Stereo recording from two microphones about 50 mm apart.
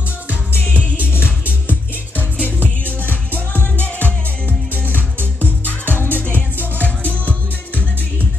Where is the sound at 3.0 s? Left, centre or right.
Left.